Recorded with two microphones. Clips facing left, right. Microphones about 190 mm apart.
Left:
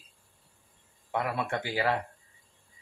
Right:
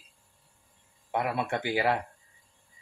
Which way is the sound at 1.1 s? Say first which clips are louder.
Right 1 dB; 10° right (ahead or behind).